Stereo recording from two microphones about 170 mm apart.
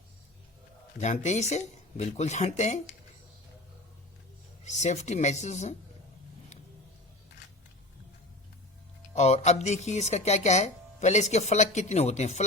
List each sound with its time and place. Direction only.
0.9 s speech: 45° left (ahead or behind)
4.6 s speech: 45° left (ahead or behind)
9.1 s speech: 40° left (ahead or behind)